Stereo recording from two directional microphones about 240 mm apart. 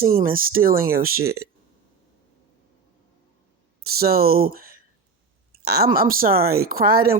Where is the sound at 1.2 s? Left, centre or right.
Right.